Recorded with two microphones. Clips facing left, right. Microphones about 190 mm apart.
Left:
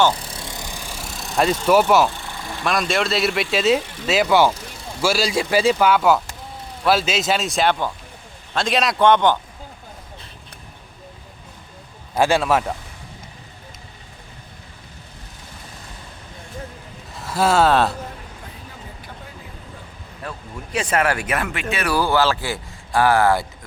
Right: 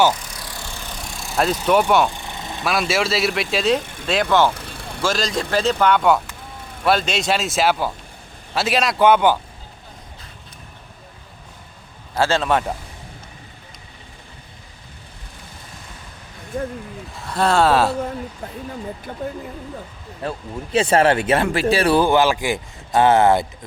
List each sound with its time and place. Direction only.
0.1 s vehicle: 30° left (ahead or behind); by 2.0 s 5° left (ahead or behind)
2.0 s vehicle: 15° right (ahead or behind)
2.6 s a man's voice: 5° right (ahead or behind)
12.1 s a man's voice: 10° left (ahead or behind)
17.2 s speech: 5° left (ahead or behind)
20.2 s speech: 30° right (ahead or behind)